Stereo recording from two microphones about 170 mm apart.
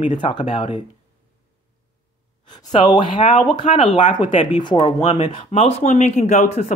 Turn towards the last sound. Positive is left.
turn(degrees=40)  # may be behind; listen again after turning